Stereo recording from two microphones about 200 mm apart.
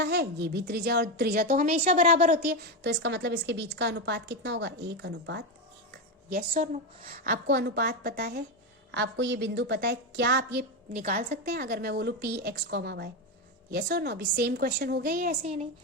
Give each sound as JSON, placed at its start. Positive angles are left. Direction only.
{"t": 0.0, "sound": "a woman's voice", "side_deg": -55}
{"t": 6.3, "sound": "a woman's voice", "side_deg": -45}
{"t": 8.9, "sound": "a woman's voice", "side_deg": -60}
{"t": 10.9, "sound": "a woman's voice", "side_deg": -35}
{"t": 11.4, "sound": "a woman's voice", "side_deg": -50}